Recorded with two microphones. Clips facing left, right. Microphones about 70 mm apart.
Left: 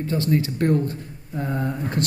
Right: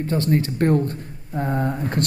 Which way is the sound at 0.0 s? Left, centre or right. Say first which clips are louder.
Right 1 dB; right.